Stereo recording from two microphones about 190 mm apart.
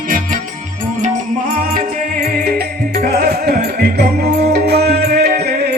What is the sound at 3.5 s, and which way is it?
Music, 55° right (ahead or behind).